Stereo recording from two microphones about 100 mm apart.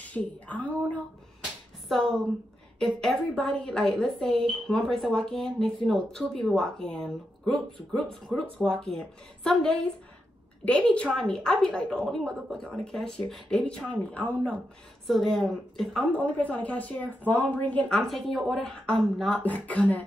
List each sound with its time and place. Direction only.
0.0 s a woman's voice: 15° left (ahead or behind)
1.9 s a woman's voice: 5° left (ahead or behind)
15.0 s a woman's voice: centre (ahead or behind)